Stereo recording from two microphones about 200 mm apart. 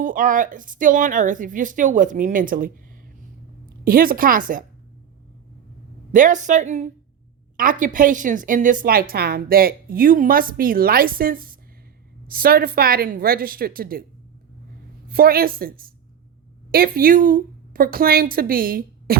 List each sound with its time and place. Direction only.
0.0 s a woman's voice: 40° right (ahead or behind)
3.8 s a woman's voice: 45° right (ahead or behind)
6.1 s a woman's voice: 40° right (ahead or behind)
15.1 s a woman's voice: 50° right (ahead or behind)